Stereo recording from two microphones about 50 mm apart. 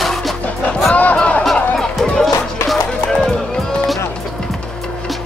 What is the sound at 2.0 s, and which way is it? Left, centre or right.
Music, centre.